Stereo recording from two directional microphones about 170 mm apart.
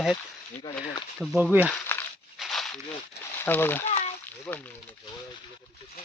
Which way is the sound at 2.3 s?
Centre (ahead or behind).